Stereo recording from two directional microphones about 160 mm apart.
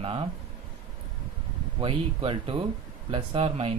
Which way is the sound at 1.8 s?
35° right (ahead or behind).